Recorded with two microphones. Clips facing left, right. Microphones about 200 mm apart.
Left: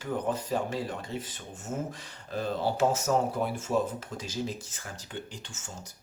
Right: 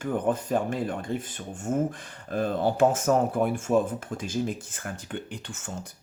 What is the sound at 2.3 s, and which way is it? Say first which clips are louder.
Speech: right 4 dB; 50° right (ahead or behind).